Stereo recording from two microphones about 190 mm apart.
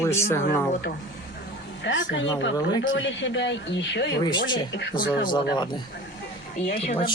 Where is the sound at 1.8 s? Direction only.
75° left (ahead or behind).